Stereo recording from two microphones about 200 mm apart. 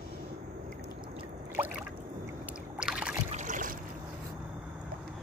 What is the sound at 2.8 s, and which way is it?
Rowboat, 5° right (ahead or behind).